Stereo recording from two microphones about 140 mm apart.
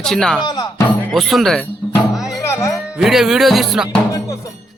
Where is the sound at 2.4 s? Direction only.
20° left (ahead or behind).